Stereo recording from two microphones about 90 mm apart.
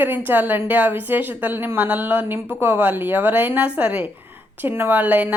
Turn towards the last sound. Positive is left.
turn(degrees=-20)  # may be behind; listen again after turning